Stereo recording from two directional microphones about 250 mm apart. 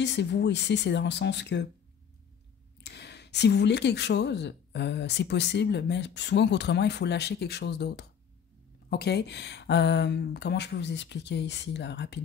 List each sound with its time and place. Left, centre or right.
0.0 s speech: left
2.8 s speech: left